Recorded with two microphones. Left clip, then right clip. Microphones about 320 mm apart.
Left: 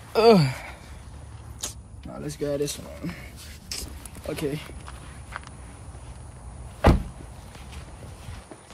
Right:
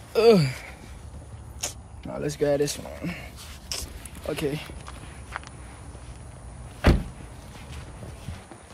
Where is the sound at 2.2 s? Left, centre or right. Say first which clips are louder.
Right 4 dB; right.